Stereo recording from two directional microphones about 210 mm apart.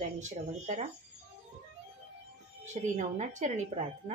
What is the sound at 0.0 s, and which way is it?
Speech, 35° right (ahead or behind).